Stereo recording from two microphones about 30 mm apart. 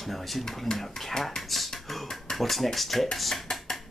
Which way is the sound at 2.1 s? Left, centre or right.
Centre.